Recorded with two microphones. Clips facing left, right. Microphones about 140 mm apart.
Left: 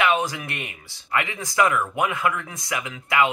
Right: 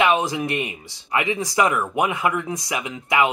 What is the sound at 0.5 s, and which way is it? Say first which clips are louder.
Speech: right 8 dB; 20° right (ahead or behind).